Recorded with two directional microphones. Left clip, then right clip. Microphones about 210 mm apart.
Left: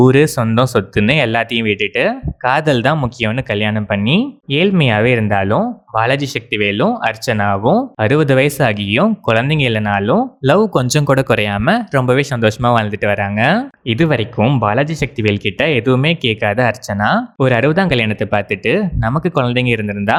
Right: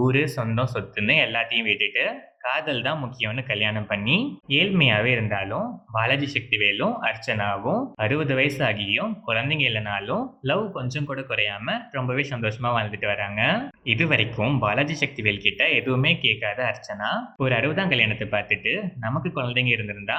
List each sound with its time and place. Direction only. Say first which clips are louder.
0.0 s speech: left 12 dB; 45° left (ahead or behind)